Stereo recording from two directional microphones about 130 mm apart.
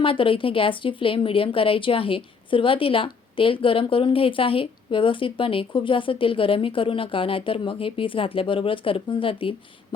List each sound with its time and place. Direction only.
0.0 s a woman's voice: 45° left (ahead or behind)